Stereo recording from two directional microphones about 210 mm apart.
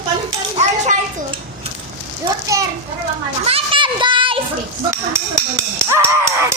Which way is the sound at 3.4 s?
25° right (ahead or behind).